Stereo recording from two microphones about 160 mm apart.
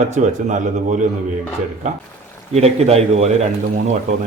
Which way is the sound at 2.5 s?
40° right (ahead or behind).